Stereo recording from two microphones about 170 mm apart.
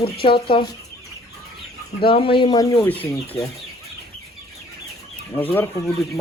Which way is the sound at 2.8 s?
10° left (ahead or behind).